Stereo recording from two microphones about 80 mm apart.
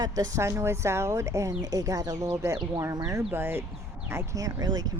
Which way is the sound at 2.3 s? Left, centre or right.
Right.